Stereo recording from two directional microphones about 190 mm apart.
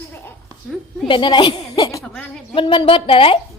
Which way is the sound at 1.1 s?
25° left (ahead or behind).